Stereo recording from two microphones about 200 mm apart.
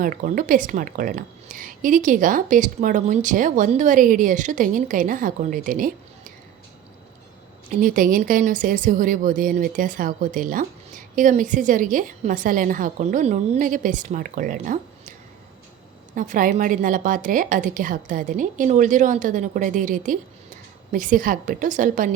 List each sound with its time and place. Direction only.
0.0 s speech: 40° right (ahead or behind)
7.8 s speech: 45° right (ahead or behind)
16.1 s speech: 40° right (ahead or behind)